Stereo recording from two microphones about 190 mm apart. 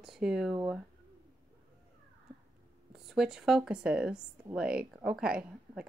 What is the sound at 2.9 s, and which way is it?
Speech, centre (ahead or behind).